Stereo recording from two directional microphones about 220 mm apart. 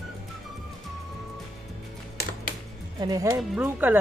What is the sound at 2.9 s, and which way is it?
Speech, 15° right (ahead or behind).